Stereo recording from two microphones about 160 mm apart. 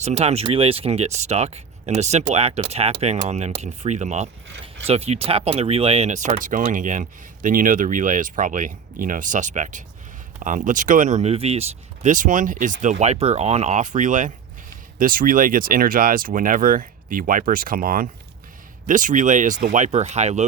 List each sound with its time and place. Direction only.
0.0 s speech: 45° right (ahead or behind)
12.0 s speech: 55° right (ahead or behind)